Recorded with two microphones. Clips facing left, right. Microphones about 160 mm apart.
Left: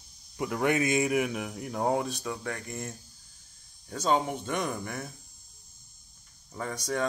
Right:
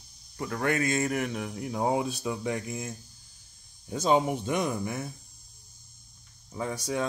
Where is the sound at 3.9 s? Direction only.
10° right (ahead or behind).